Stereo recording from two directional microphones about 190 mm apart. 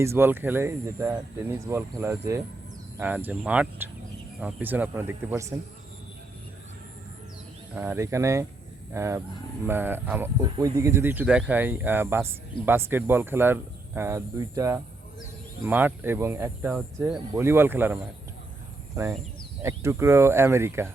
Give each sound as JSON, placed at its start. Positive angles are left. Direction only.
{"t": 0.0, "sound": "speech", "side_deg": -10}
{"t": 7.8, "sound": "speech", "side_deg": -15}